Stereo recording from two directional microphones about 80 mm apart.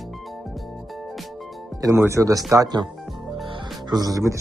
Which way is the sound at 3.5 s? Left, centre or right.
Right.